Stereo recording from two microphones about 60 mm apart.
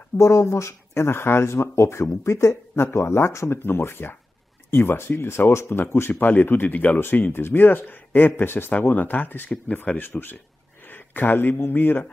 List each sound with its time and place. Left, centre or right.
0.2 s speech: left
6.2 s speech: left
10.9 s a sound: left
11.5 s speech: left